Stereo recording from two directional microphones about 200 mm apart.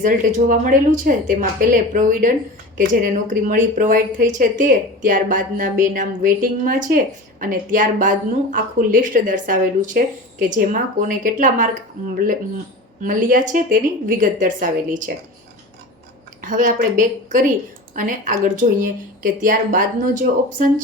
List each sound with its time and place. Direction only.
0.0 s a woman's voice: 40° right (ahead or behind)
16.4 s a woman's voice: 40° right (ahead or behind)